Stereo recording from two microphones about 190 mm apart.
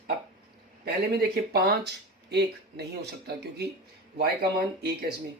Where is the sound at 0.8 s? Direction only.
50° right (ahead or behind).